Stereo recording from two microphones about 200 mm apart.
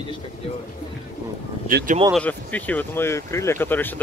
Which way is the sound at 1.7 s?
50° right (ahead or behind).